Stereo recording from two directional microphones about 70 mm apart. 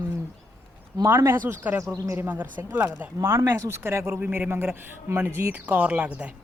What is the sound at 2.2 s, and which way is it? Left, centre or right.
Speech, right.